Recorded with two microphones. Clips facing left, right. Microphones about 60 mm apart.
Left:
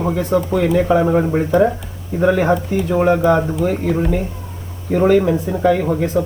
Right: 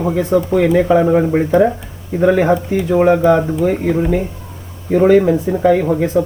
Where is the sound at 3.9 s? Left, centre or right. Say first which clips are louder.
Right 3 dB; centre.